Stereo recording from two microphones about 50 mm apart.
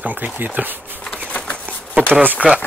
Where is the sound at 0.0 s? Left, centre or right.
Right.